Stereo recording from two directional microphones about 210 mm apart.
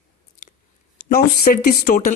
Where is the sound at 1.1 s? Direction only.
45° left (ahead or behind).